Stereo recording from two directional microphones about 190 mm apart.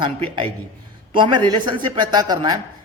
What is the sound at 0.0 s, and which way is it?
A man's voice, 30° right (ahead or behind).